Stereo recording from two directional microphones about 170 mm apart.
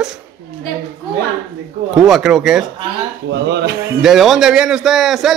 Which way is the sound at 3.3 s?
85° right.